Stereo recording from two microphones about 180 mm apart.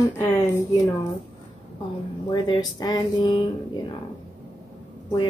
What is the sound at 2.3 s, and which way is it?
Speech, 20° left (ahead or behind).